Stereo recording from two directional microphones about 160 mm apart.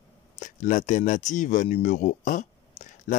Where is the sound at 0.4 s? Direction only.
50° left (ahead or behind).